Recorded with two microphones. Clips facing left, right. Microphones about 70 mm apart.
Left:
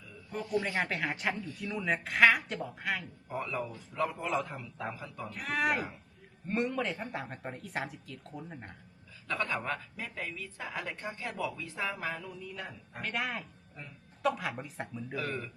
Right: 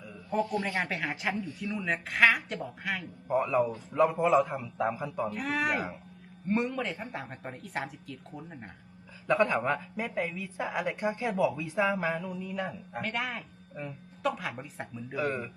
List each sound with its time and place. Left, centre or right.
0.3 s a woman's voice: centre
3.2 s a woman's voice: centre
5.3 s a woman's voice: centre
9.2 s a woman's voice: centre
15.2 s a woman's voice: centre